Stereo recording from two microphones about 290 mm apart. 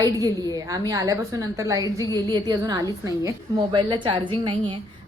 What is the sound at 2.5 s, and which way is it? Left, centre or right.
A woman's voice, centre.